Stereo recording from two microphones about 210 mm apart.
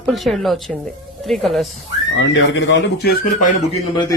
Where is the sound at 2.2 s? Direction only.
60° left (ahead or behind); by 3.5 s 45° left (ahead or behind).